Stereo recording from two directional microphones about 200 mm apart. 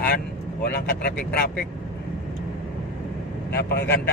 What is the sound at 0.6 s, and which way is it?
Speech, 50° left (ahead or behind).